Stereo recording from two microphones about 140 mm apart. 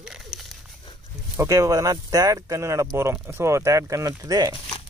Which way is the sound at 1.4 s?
25° right (ahead or behind).